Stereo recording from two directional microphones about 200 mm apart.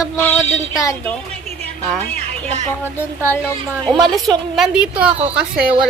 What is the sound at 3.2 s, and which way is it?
Child singing, 10° left (ahead or behind).